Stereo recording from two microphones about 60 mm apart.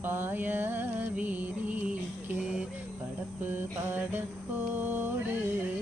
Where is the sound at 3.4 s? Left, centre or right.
Right.